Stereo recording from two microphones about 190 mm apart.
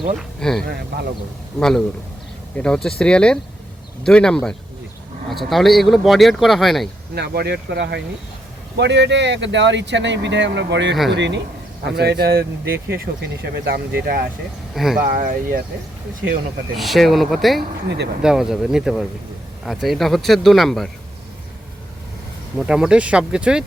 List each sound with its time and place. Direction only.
0.2 s speech: 5° left (ahead or behind)
0.6 s speech: 55° right (ahead or behind)
1.5 s speech: 5° left (ahead or behind)
7.1 s speech: 55° right (ahead or behind)
16.7 s speech: centre (ahead or behind)
17.8 s speech: 65° right (ahead or behind)
18.2 s speech: 5° right (ahead or behind)
22.5 s speech: 5° right (ahead or behind)